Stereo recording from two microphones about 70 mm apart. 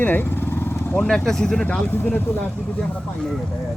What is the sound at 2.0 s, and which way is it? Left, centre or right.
Speech, left.